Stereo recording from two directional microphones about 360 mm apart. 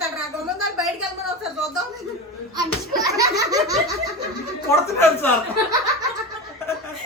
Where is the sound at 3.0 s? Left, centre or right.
Centre.